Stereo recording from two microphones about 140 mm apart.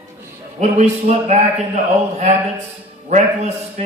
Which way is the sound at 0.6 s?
55° right (ahead or behind).